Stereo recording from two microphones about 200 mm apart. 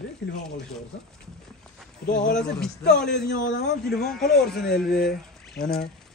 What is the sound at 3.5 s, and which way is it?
Speech, 55° left (ahead or behind).